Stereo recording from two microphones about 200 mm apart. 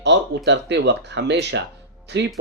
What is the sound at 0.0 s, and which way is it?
Speech, 60° right (ahead or behind).